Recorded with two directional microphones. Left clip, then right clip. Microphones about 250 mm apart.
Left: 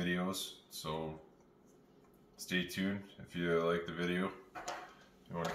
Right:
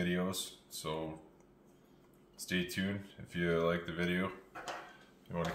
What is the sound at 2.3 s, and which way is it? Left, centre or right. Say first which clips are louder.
Speech: right 1 dB; right.